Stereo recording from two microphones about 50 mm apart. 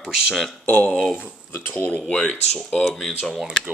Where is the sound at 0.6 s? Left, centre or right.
Left.